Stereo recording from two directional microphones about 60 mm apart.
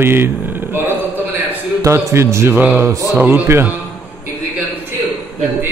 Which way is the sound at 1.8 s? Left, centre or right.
Right.